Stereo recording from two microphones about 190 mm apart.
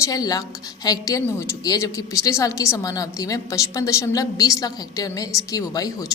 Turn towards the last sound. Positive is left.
turn(degrees=20)  # may be behind; listen again after turning